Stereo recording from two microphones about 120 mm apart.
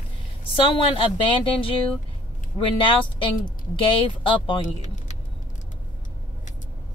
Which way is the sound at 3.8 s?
45° left (ahead or behind).